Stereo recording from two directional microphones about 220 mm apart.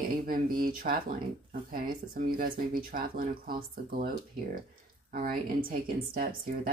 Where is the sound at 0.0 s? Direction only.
40° right (ahead or behind).